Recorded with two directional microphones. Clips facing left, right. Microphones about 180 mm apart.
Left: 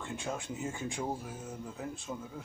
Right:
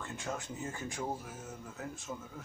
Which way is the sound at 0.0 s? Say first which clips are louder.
Left 2 dB; 15° left (ahead or behind).